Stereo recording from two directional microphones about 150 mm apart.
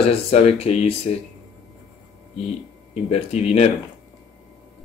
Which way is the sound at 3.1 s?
45° left (ahead or behind).